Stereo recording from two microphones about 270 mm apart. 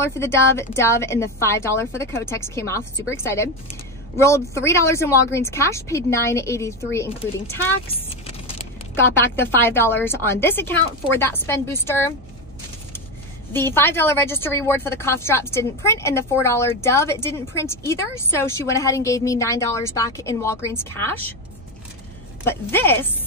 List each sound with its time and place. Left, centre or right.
0.0 s a woman's voice: centre
7.9 s vehicle: left
9.2 s a woman's voice: centre
13.5 s a woman's voice: centre
22.4 s a woman's voice: centre